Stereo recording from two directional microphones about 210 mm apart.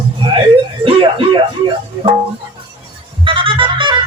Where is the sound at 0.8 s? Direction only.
25° right (ahead or behind).